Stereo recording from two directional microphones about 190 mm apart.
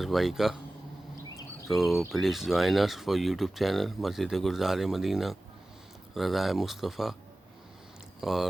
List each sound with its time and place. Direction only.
0.0 s speech: centre (ahead or behind)
1.7 s speech: centre (ahead or behind)
8.2 s speech: centre (ahead or behind)